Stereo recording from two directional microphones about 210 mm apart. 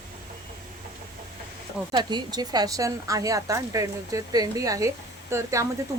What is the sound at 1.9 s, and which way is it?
A woman's voice, 20° right (ahead or behind).